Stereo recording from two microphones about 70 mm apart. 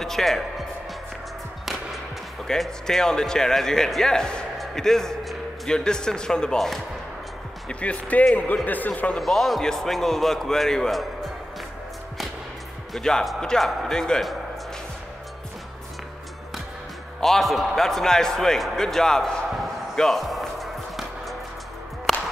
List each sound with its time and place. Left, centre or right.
0.0 s speech: centre
2.4 s speech: centre
7.6 s a man's voice: centre
9.2 s speech: centre
12.9 s speech: centre
17.2 s basketball bounce: centre
22.1 s music: centre